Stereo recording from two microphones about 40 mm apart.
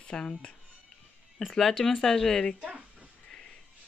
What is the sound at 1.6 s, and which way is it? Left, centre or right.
Speech, centre.